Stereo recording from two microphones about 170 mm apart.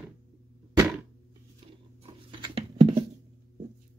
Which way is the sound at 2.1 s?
30° right (ahead or behind).